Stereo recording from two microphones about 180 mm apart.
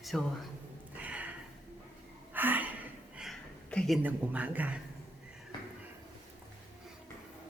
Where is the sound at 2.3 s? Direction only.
10° right (ahead or behind).